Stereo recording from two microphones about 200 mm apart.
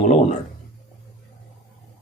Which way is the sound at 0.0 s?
35° left (ahead or behind).